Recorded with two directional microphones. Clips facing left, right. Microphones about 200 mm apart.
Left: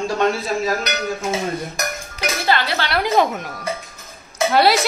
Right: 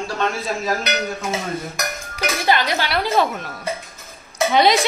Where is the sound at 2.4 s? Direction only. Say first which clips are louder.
Right 1 dB; 15° right (ahead or behind).